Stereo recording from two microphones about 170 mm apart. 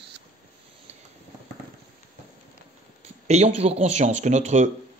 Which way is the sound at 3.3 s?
40° right (ahead or behind).